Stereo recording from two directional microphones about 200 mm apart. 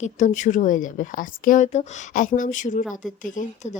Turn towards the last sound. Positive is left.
turn(degrees=40)  # may be behind; listen again after turning